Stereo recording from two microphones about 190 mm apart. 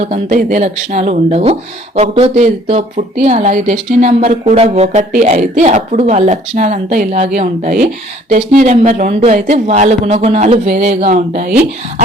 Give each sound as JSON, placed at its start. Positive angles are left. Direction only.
{"t": 0.0, "sound": "speech", "side_deg": -40}